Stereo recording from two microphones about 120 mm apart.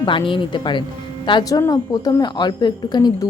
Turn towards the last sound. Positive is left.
turn(degrees=35)  # may be behind; listen again after turning